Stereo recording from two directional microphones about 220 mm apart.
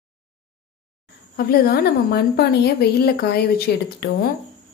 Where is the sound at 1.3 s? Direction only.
45° left (ahead or behind).